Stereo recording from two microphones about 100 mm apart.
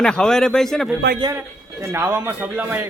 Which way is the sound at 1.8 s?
25° right (ahead or behind).